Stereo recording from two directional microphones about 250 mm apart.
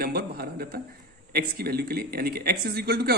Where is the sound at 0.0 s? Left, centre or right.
Right.